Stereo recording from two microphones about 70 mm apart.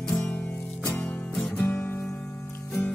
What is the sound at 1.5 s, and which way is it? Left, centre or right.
Music, left.